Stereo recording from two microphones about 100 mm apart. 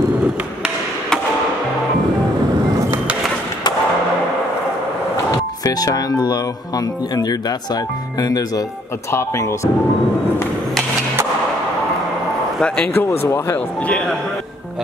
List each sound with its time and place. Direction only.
5.6 s speech: 40° left (ahead or behind)
12.6 s speech: 15° left (ahead or behind)